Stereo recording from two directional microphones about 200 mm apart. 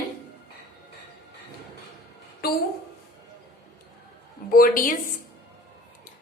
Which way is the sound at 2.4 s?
50° left (ahead or behind).